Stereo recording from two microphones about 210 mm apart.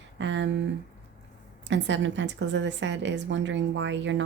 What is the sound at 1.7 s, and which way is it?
Speech, 60° right (ahead or behind).